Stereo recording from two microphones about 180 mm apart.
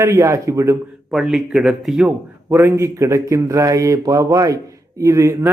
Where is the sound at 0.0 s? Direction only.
15° right (ahead or behind).